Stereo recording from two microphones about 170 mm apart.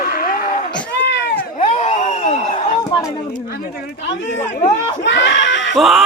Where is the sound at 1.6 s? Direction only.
40° left (ahead or behind).